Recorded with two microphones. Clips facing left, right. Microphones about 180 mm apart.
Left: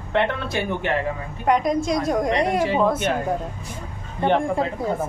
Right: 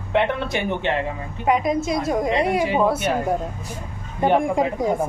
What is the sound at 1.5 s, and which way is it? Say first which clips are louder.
A woman's voice: even; 5° right (ahead or behind).